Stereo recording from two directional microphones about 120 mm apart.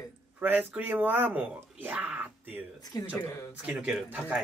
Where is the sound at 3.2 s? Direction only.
25° left (ahead or behind).